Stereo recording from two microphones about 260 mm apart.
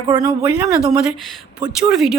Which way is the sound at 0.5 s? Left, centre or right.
Centre.